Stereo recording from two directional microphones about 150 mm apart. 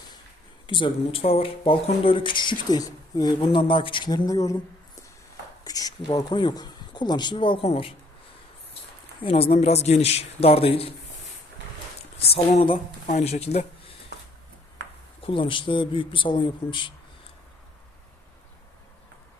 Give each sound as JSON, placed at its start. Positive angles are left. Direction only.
{"t": 0.7, "sound": "speech", "side_deg": 35}
{"t": 5.6, "sound": "speech", "side_deg": 25}
{"t": 9.2, "sound": "speech", "side_deg": 40}
{"t": 12.3, "sound": "speech", "side_deg": 40}
{"t": 15.2, "sound": "speech", "side_deg": 35}